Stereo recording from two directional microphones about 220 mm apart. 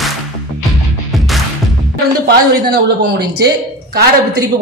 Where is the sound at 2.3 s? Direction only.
50° right (ahead or behind).